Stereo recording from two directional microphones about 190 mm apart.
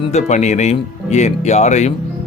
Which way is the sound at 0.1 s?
35° left (ahead or behind).